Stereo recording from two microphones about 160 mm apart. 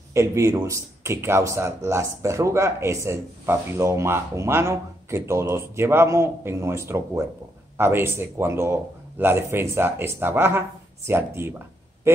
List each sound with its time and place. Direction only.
0.1 s a man's voice: 15° right (ahead or behind)